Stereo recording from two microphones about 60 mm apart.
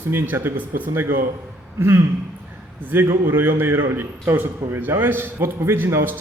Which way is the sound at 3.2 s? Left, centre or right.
Right.